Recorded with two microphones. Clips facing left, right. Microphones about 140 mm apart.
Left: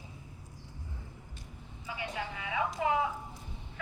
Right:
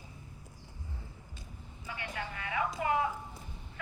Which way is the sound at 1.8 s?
10° left (ahead or behind).